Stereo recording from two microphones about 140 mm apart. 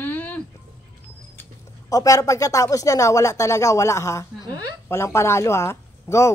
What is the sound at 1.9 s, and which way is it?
Speech, 25° left (ahead or behind).